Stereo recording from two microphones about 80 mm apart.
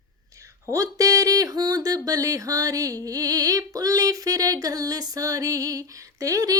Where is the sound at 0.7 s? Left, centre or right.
Right.